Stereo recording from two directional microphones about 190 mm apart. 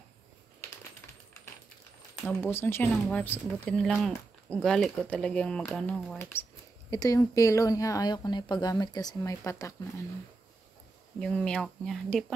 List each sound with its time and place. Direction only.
2.2 s speech: 10° left (ahead or behind)
11.1 s speech: 5° left (ahead or behind)